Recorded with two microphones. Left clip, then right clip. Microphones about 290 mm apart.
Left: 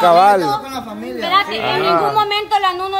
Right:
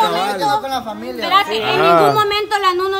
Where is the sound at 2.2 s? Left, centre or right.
Centre.